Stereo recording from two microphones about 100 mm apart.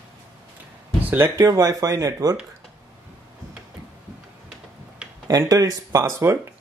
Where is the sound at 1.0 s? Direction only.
15° right (ahead or behind).